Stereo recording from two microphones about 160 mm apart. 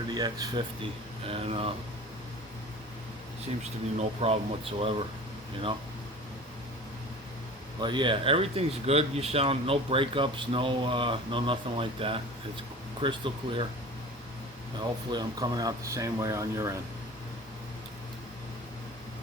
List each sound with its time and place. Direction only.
0.1 s speech: 25° right (ahead or behind)
1.3 s speech: 35° right (ahead or behind)
3.6 s speech: 40° right (ahead or behind)
7.8 s speech: 30° right (ahead or behind)
14.8 s speech: 25° right (ahead or behind)